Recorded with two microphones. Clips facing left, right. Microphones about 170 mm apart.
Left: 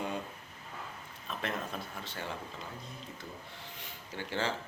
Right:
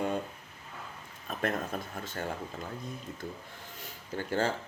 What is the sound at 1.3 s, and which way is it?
Speech, 50° right (ahead or behind).